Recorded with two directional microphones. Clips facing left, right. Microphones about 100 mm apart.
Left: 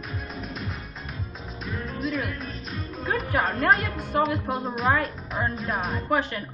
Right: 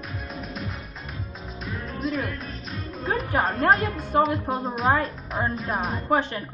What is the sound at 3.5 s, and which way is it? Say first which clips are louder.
Speech: right 2 dB; 40° right (ahead or behind).